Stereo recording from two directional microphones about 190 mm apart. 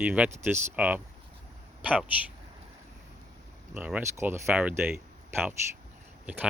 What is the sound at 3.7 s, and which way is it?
Speech, 10° right (ahead or behind).